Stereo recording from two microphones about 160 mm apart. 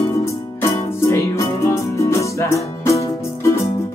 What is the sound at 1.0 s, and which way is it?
Music, 15° left (ahead or behind).